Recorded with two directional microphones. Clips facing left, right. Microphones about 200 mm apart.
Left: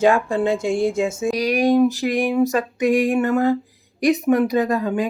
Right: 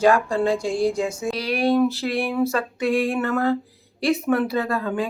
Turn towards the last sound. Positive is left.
turn(degrees=15)  # may be behind; listen again after turning